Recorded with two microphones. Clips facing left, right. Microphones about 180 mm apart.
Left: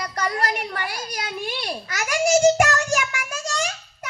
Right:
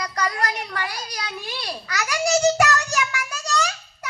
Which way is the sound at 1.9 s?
50° left (ahead or behind).